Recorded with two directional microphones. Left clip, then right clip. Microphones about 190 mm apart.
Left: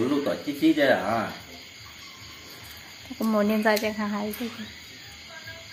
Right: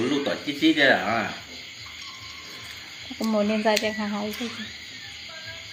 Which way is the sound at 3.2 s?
15° left (ahead or behind).